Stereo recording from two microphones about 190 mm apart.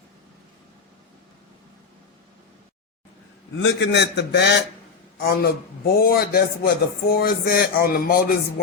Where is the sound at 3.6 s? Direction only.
65° left (ahead or behind).